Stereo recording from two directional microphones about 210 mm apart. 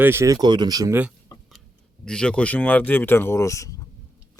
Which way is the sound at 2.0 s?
5° left (ahead or behind).